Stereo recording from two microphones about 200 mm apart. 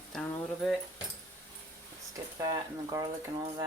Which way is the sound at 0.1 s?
Centre (ahead or behind).